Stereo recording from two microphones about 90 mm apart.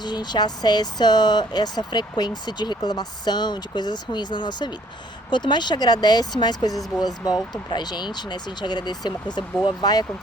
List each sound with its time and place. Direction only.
0.0 s speech: 55° left (ahead or behind)